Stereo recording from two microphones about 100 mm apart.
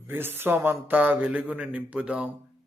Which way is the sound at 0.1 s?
20° right (ahead or behind).